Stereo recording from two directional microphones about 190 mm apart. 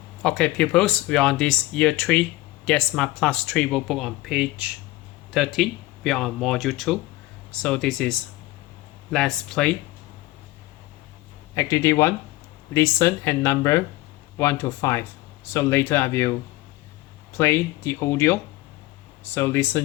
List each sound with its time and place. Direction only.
0.2 s speech: 5° left (ahead or behind)
9.1 s speech: 5° left (ahead or behind)
11.5 s speech: 15° left (ahead or behind)
17.3 s speech: 10° left (ahead or behind)